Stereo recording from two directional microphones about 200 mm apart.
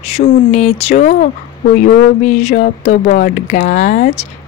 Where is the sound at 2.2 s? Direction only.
35° left (ahead or behind).